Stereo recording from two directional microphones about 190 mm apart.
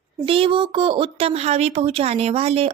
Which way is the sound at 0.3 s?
30° right (ahead or behind).